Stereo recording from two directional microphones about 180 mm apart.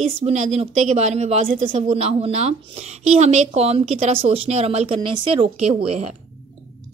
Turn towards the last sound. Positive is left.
turn(degrees=-30)  # may be behind; listen again after turning